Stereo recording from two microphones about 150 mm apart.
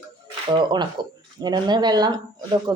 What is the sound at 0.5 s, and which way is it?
Speech, 30° right (ahead or behind).